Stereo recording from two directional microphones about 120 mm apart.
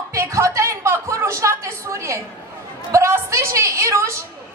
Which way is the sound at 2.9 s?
20° right (ahead or behind).